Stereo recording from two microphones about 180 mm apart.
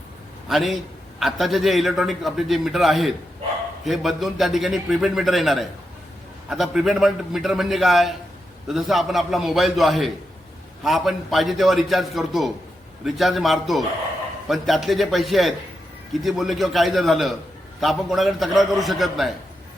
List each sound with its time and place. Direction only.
0.4 s a man's voice: centre (ahead or behind)